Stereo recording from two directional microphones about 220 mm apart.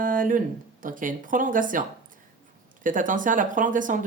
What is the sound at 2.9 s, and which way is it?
Speech, 35° right (ahead or behind).